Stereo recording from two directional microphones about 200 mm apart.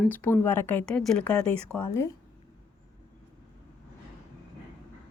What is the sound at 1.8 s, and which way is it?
Speech, 15° left (ahead or behind).